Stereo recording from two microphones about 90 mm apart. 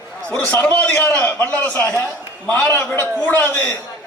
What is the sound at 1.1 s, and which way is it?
A man's voice, 15° left (ahead or behind).